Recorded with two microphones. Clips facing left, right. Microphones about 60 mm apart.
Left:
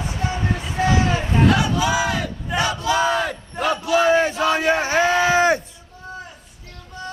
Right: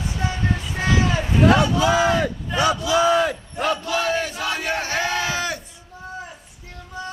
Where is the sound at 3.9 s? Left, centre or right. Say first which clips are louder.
Left 6 dB; left.